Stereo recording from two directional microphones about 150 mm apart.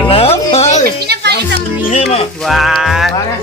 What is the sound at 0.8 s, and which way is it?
Speech, 90° right.